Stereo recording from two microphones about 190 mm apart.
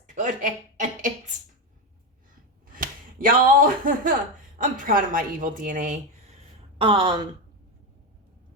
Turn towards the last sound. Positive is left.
turn(degrees=-20)  # may be behind; listen again after turning